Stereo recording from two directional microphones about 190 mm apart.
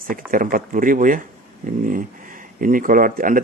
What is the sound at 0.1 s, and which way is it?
Speech, 45° right (ahead or behind).